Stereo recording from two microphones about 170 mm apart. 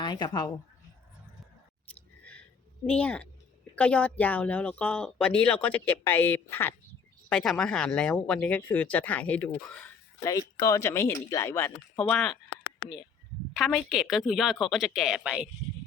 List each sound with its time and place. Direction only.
0.0 s speech: 25° left (ahead or behind)
2.8 s a woman's voice: 5° left (ahead or behind)
10.2 s a woman's voice: 20° left (ahead or behind)
13.6 s speech: centre (ahead or behind)